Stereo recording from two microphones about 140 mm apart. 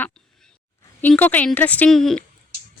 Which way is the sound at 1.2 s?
10° left (ahead or behind).